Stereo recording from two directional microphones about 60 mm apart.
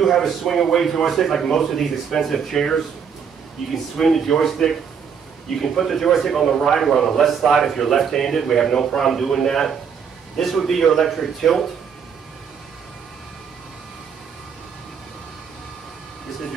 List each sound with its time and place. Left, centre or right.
0.0 s a man's voice: centre